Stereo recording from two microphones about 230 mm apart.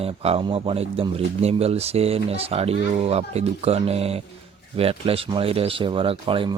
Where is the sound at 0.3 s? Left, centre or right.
Right.